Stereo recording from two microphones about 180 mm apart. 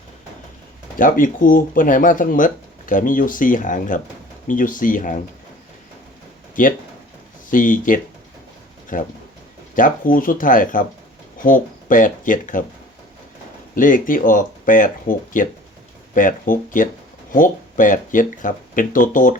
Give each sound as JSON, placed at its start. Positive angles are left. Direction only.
{"t": 0.9, "sound": "speech", "side_deg": 50}
{"t": 6.6, "sound": "speech", "side_deg": 45}
{"t": 13.7, "sound": "speech", "side_deg": 45}